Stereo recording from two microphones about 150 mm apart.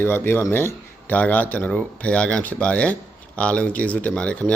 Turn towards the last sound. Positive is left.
turn(degrees=10)  # may be behind; listen again after turning